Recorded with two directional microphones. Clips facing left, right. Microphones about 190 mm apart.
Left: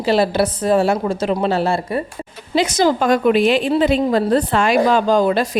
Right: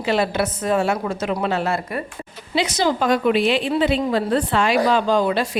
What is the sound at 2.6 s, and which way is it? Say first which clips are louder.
A woman's voice: left 4 dB; 45° left (ahead or behind).